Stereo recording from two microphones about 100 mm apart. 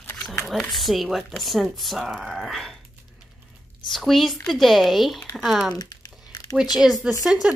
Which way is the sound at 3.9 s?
Centre (ahead or behind).